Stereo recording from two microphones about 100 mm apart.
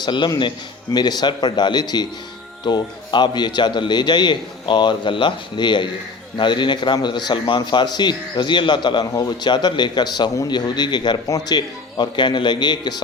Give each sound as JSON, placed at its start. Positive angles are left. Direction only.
{"t": 0.0, "sound": "a man's voice", "side_deg": 50}